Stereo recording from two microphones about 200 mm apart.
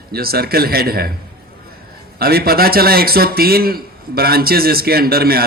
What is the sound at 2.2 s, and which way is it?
A man's voice, 50° right (ahead or behind).